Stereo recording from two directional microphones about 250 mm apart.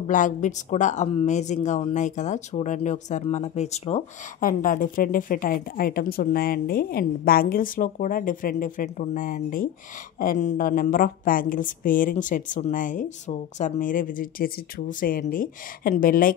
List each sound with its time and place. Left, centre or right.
0.0 s speech: left